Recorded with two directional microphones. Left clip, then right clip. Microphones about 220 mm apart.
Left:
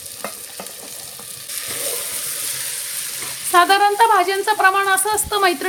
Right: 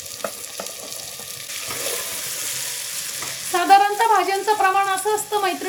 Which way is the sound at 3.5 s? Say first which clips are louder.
Left 2 dB; 40° left (ahead or behind).